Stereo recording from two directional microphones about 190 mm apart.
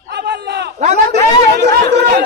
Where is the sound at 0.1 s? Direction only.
65° right (ahead or behind).